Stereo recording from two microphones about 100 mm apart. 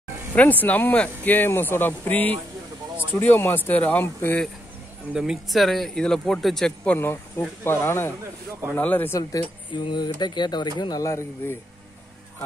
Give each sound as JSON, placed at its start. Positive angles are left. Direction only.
{"t": 0.4, "sound": "speech", "side_deg": 15}
{"t": 5.1, "sound": "speech", "side_deg": -5}
{"t": 7.0, "sound": "speech", "side_deg": 25}
{"t": 9.7, "sound": "speech", "side_deg": 50}